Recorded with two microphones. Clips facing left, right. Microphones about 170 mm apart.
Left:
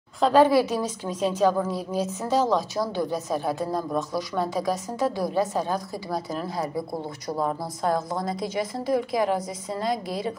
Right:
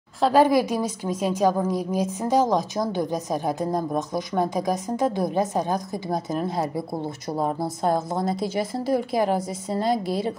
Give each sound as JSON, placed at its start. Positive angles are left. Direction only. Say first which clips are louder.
{"t": 0.2, "sound": "a woman's voice", "louder": "even", "side_deg": -10}